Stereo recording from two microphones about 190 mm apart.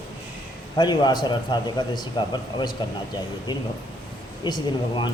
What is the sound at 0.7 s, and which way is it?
A man's voice, 20° left (ahead or behind).